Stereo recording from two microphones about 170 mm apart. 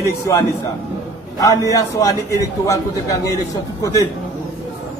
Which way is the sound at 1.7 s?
20° left (ahead or behind).